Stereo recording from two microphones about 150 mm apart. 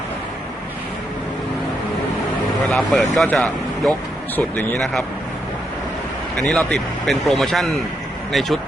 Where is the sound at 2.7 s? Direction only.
Centre (ahead or behind).